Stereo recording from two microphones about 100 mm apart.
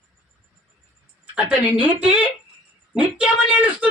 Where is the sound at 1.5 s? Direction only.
15° right (ahead or behind).